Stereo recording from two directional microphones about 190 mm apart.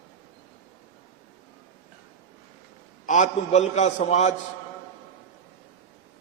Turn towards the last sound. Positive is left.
turn(degrees=35)  # may be behind; listen again after turning